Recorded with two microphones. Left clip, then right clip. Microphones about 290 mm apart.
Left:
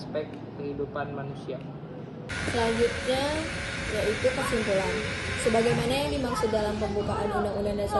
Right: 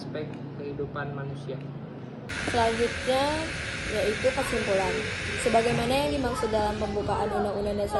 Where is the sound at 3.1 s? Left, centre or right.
Centre.